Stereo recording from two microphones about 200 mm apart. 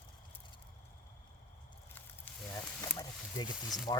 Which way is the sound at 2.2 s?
10° left (ahead or behind).